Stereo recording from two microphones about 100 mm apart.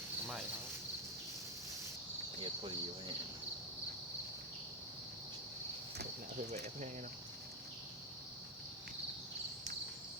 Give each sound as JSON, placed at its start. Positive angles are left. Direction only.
{"t": 2.4, "sound": "cricket", "side_deg": -65}